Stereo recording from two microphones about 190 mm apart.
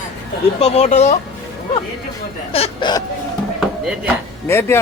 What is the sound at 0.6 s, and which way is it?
Speech, 35° left (ahead or behind).